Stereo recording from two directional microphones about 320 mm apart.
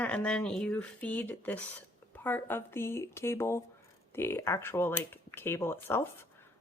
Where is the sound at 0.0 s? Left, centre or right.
Centre.